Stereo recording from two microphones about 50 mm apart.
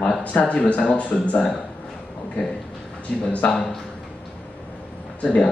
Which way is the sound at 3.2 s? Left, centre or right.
Left.